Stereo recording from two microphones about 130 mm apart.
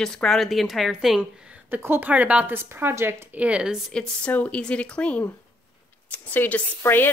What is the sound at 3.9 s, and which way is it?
Speech, 10° left (ahead or behind).